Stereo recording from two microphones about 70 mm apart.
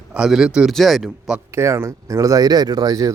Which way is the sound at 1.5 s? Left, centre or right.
Right.